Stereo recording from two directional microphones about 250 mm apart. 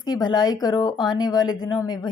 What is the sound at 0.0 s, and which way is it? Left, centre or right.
Speech, centre.